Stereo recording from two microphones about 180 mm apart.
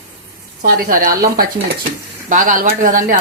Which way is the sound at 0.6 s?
50° right (ahead or behind).